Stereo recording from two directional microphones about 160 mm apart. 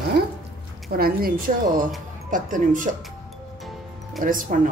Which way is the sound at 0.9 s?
70° right (ahead or behind).